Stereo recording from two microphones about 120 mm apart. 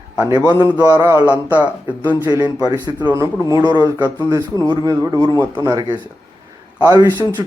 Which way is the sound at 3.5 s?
30° right (ahead or behind).